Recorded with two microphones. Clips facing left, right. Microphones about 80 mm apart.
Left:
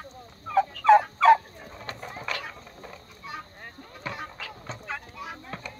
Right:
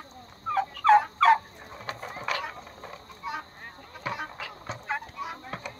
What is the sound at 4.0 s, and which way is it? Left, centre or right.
Music, centre.